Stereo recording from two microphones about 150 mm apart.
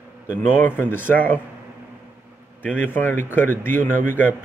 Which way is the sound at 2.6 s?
10° left (ahead or behind).